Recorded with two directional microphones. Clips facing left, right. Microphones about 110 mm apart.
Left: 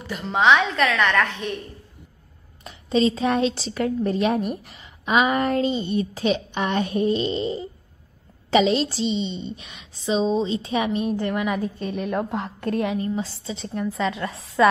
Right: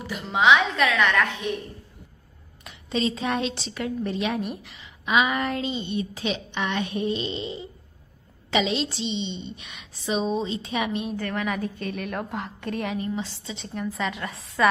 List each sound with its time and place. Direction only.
0.0 s a woman's voice: 5° right (ahead or behind)
2.6 s a woman's voice: 35° left (ahead or behind)
11.1 s a woman's voice: 20° left (ahead or behind)